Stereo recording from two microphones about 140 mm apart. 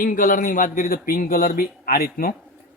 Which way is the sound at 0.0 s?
75° left (ahead or behind).